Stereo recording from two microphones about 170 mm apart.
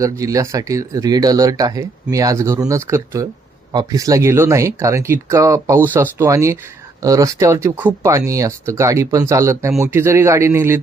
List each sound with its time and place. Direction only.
0.0 s speech: 20° right (ahead or behind)